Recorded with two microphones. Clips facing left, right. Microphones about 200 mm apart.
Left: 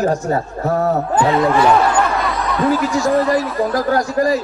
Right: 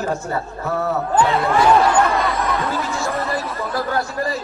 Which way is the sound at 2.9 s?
40° left (ahead or behind).